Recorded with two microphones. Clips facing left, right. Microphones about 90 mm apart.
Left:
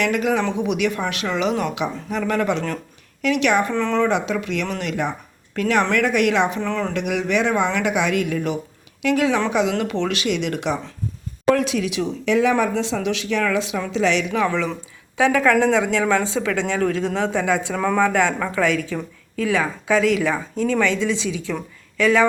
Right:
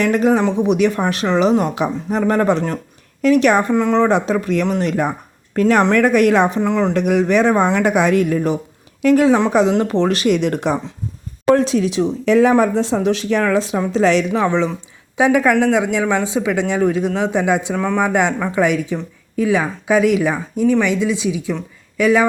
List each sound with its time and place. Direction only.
0.0 s speech: 35° right (ahead or behind)
3.7 s speech: 15° right (ahead or behind)
3.9 s a woman's voice: 35° right (ahead or behind)
6.6 s speech: 20° right (ahead or behind)
6.9 s speech: 40° right (ahead or behind)
15.2 s speech: 15° right (ahead or behind)